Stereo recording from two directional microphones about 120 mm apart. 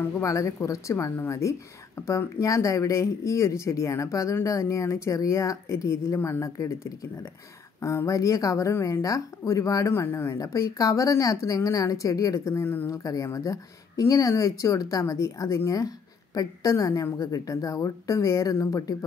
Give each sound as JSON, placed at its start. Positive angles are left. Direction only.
{"t": 0.0, "sound": "speech", "side_deg": 25}